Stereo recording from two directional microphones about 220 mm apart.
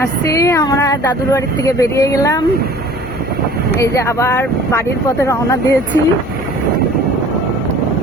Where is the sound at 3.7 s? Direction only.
15° left (ahead or behind).